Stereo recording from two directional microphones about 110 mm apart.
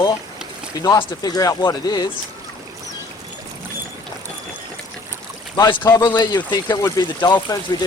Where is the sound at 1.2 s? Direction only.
35° left (ahead or behind).